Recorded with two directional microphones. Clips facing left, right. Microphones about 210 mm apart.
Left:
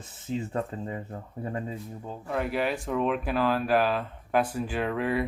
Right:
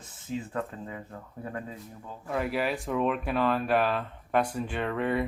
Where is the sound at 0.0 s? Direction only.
25° left (ahead or behind).